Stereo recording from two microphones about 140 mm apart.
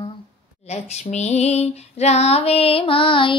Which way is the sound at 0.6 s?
50° left (ahead or behind).